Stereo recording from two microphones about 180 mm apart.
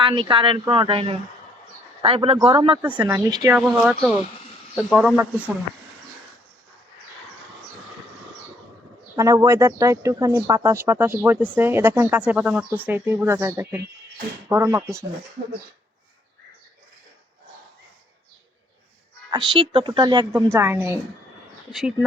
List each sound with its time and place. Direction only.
0.0 s a woman's voice: 30° right (ahead or behind)
3.6 s speech: 5° right (ahead or behind)
9.1 s speech: 15° right (ahead or behind)
19.3 s a woman's voice: 25° right (ahead or behind)
21.7 s speech: centre (ahead or behind)